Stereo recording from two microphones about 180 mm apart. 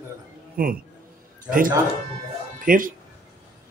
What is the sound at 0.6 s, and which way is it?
Speech, 50° right (ahead or behind).